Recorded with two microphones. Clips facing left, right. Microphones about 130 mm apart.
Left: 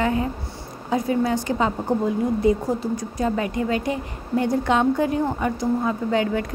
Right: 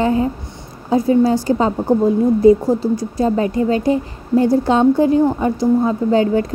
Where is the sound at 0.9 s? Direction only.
30° right (ahead or behind).